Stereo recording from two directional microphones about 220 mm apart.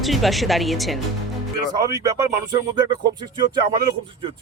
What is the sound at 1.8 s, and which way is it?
Speech, 15° right (ahead or behind).